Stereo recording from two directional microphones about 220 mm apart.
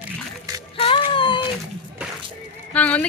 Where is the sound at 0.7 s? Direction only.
25° left (ahead or behind).